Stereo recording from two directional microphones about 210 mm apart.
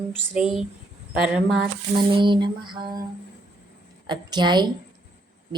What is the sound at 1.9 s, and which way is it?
A woman's voice, 25° right (ahead or behind).